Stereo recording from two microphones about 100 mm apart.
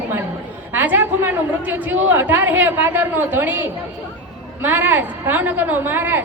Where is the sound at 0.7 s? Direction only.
20° right (ahead or behind).